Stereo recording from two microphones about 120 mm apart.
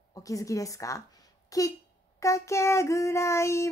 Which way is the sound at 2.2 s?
25° left (ahead or behind).